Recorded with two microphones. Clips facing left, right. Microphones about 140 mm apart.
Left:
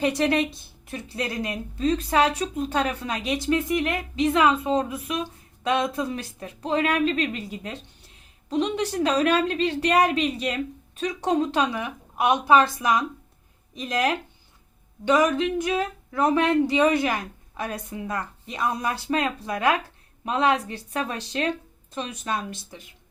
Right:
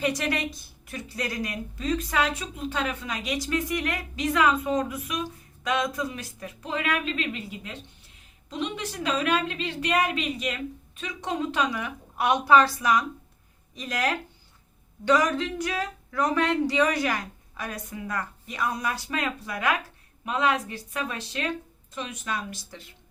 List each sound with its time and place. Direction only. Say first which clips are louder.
0.0 s a woman's voice: left 5 dB; 30° left (ahead or behind)